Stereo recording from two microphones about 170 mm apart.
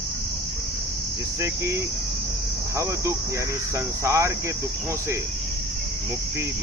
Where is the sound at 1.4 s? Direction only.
15° right (ahead or behind).